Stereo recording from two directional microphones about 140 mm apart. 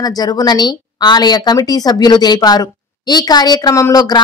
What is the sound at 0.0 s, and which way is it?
A woman's voice, 25° left (ahead or behind).